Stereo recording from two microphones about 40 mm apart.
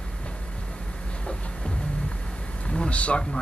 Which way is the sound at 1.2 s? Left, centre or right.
Left.